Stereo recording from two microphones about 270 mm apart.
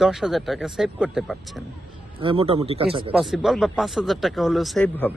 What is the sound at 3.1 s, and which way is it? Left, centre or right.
Speech, centre.